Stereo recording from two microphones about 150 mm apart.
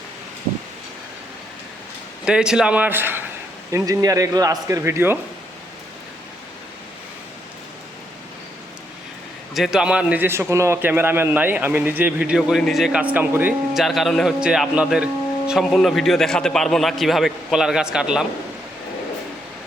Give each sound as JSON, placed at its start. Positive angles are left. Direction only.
{"t": 2.2, "sound": "a man's voice", "side_deg": -5}
{"t": 9.6, "sound": "a man's voice", "side_deg": -5}
{"t": 13.7, "sound": "a man's voice", "side_deg": 0}